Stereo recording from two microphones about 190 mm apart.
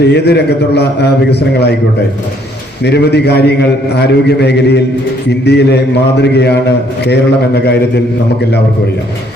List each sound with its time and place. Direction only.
0.0 s a man's voice: 60° left (ahead or behind)
2.8 s a man's voice: 60° left (ahead or behind)